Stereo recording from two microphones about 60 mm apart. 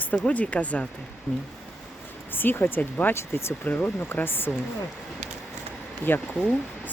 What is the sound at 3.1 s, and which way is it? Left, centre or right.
Speech, left.